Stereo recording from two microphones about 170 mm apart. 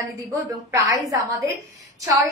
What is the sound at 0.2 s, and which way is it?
A woman's voice, 20° right (ahead or behind).